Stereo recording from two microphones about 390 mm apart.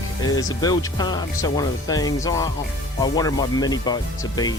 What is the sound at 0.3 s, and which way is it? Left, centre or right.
Speech, centre.